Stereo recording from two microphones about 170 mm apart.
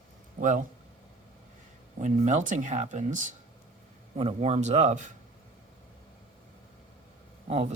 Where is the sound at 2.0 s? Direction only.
45° right (ahead or behind).